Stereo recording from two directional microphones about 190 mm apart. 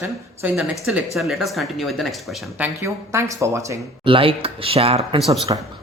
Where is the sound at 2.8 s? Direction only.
15° right (ahead or behind).